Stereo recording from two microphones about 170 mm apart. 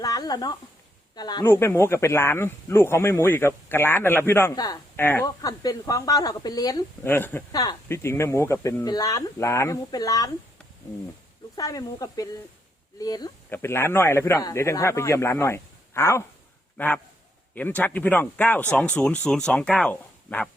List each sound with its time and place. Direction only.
0.0 s a sound: 20° left (ahead or behind)
1.1 s speech: 25° left (ahead or behind)
11.5 s speech: 20° left (ahead or behind)